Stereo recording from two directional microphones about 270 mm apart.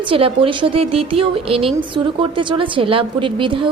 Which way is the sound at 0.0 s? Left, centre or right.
Centre.